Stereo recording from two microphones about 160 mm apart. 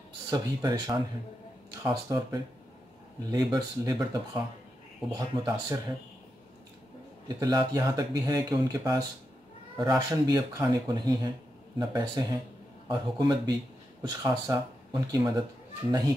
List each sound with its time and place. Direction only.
0.3 s speech: 25° right (ahead or behind)
7.2 s speech: 25° right (ahead or behind)